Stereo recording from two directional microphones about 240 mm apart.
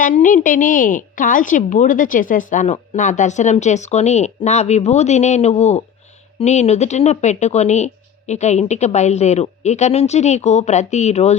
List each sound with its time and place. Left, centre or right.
0.0 s a woman's voice: left